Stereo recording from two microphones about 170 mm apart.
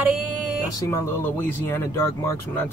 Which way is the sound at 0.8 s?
15° left (ahead or behind).